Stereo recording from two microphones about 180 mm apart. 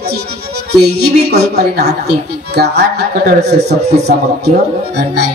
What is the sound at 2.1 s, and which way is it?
A woman's voice, 65° right (ahead or behind).